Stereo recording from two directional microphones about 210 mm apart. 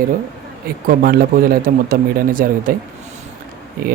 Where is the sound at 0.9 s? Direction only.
45° right (ahead or behind).